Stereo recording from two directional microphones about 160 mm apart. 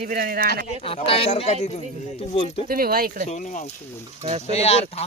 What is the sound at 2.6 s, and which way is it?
Speech, 65° right (ahead or behind).